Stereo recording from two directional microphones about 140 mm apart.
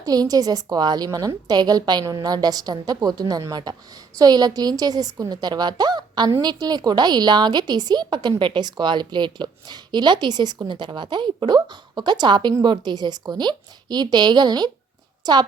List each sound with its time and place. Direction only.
0.0 s a woman's voice: 25° right (ahead or behind)